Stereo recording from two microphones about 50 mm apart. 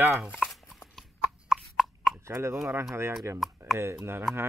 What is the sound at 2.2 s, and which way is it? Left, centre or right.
Speech, right.